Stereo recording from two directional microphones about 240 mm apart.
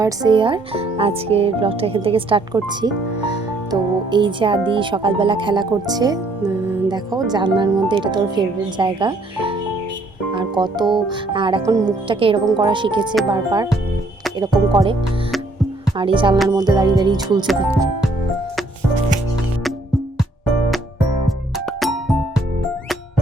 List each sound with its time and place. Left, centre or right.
0.0 s speech: centre
13.2 s music: centre
16.0 s speech: right
16.5 s music: centre
21.7 s music: centre